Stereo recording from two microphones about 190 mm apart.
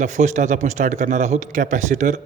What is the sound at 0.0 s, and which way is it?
A man's voice, 40° right (ahead or behind).